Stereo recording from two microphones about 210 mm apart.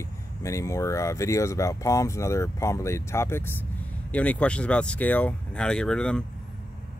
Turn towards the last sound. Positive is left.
turn(degrees=5)  # may be behind; listen again after turning